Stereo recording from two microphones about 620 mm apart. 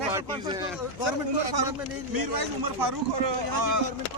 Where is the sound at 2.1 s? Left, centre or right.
Right.